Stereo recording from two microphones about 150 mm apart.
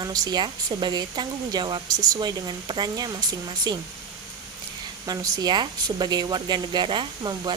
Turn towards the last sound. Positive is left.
turn(degrees=-30)  # may be behind; listen again after turning